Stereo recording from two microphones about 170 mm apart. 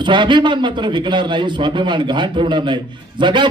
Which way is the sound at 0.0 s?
25° right (ahead or behind).